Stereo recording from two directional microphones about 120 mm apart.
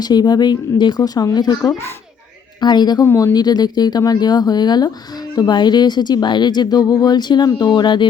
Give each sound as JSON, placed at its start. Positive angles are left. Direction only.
{"t": 0.0, "sound": "speech", "side_deg": 35}
{"t": 3.1, "sound": "speech", "side_deg": 20}
{"t": 3.3, "sound": "speech", "side_deg": 35}